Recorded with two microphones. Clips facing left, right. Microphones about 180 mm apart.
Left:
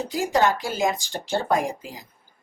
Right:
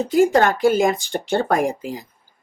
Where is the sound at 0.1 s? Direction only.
55° right (ahead or behind).